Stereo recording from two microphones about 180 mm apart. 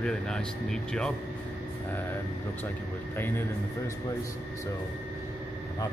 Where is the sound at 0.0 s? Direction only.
5° left (ahead or behind).